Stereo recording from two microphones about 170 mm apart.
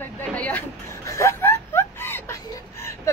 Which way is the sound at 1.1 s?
15° left (ahead or behind).